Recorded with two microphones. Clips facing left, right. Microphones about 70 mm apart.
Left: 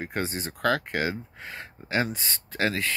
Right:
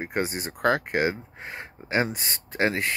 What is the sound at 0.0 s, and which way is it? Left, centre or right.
Speech, centre.